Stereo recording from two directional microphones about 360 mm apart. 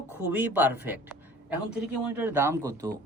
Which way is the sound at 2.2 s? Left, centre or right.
Centre.